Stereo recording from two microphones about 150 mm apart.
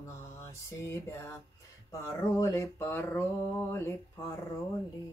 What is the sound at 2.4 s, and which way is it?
Speech, 20° left (ahead or behind).